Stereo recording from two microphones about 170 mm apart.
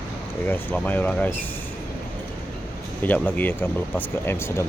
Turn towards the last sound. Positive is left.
turn(degrees=15)  # may be behind; listen again after turning